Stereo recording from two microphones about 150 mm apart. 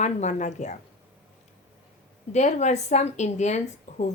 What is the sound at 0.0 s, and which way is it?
Speech, 50° left (ahead or behind).